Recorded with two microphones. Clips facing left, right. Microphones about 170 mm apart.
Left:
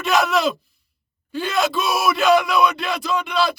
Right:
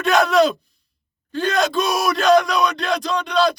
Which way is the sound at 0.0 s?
Centre (ahead or behind).